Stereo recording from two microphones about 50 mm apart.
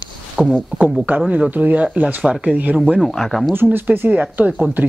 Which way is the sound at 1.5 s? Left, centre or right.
Right.